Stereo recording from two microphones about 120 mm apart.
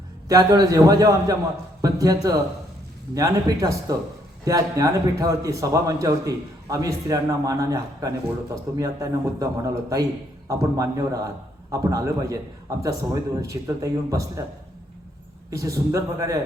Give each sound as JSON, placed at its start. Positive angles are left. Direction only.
{"t": 0.3, "sound": "a man's voice", "side_deg": -30}
{"t": 13.5, "sound": "a man's voice", "side_deg": -25}
{"t": 15.4, "sound": "a man's voice", "side_deg": -25}